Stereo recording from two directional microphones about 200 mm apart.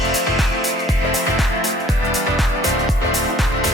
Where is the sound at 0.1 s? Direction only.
Centre (ahead or behind).